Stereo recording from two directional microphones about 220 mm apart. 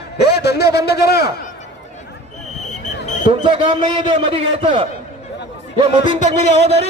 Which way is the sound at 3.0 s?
35° left (ahead or behind).